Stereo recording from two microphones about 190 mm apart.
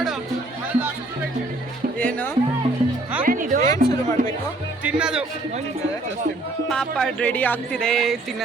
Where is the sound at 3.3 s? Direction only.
45° right (ahead or behind).